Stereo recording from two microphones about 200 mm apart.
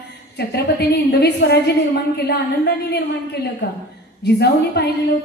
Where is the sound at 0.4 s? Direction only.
55° left (ahead or behind).